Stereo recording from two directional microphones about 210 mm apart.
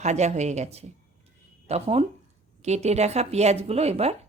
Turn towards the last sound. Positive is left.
turn(degrees=-30)  # may be behind; listen again after turning